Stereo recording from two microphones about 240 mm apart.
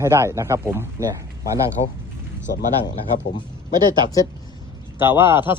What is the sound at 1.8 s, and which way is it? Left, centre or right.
Speech, left.